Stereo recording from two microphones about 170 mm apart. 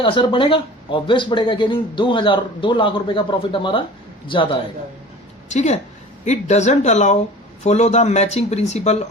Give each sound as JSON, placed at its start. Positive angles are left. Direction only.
{"t": 0.0, "sound": "speech", "side_deg": 30}
{"t": 5.5, "sound": "a woman's voice", "side_deg": 45}